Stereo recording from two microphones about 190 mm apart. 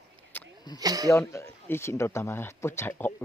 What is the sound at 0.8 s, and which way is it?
Speech, 20° right (ahead or behind).